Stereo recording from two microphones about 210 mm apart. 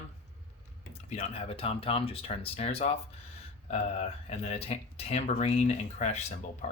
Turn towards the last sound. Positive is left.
turn(degrees=35)  # may be behind; listen again after turning